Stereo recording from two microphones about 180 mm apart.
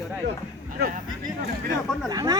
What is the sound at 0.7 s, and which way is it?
Speech, 60° right (ahead or behind).